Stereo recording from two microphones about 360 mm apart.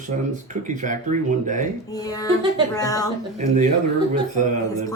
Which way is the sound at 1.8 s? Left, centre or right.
Centre.